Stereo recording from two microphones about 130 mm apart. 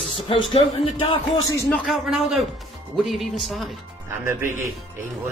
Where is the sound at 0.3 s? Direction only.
40° left (ahead or behind).